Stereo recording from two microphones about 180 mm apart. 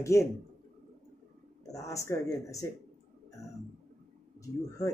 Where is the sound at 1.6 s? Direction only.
20° left (ahead or behind).